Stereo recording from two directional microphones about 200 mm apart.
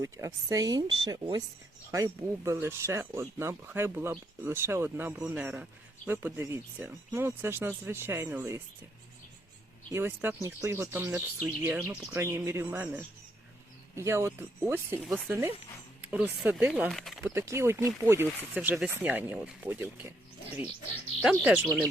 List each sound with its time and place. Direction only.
0.0 s speech: 15° right (ahead or behind)
9.9 s speech: 10° right (ahead or behind)
21.4 s speech: 5° right (ahead or behind)